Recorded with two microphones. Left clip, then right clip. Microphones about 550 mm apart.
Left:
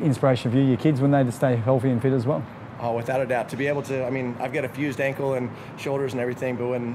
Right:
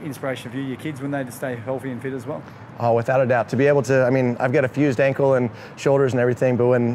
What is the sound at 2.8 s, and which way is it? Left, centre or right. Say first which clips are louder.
Speech: right 7 dB; right.